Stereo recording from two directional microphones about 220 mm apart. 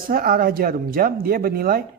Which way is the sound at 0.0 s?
40° right (ahead or behind).